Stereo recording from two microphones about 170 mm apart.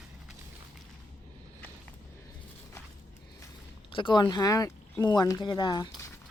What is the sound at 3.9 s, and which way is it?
Speech, 30° left (ahead or behind).